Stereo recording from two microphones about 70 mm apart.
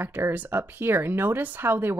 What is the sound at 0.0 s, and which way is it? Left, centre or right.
Speech, right.